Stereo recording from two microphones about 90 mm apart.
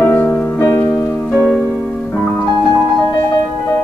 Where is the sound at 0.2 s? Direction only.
30° left (ahead or behind).